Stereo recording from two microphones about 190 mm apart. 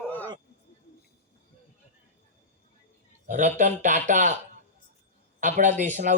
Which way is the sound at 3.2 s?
40° right (ahead or behind).